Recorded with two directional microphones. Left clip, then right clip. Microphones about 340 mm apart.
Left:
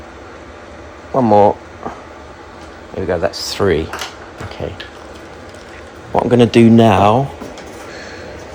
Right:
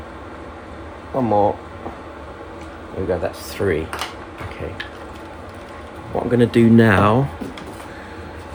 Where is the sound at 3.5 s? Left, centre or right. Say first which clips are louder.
Left 5 dB; left.